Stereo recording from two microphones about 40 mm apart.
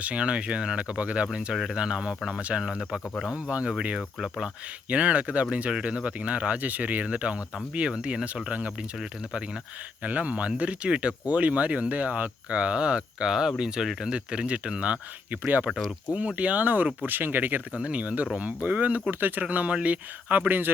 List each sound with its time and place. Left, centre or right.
0.0 s speech: right
4.9 s speech: right
10.0 s speech: right
11.3 s speech: right
15.3 s speech: right
17.7 s speech: right
20.5 s speech: right